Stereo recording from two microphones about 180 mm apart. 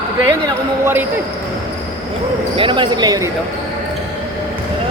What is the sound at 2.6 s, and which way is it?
Speech, 25° right (ahead or behind).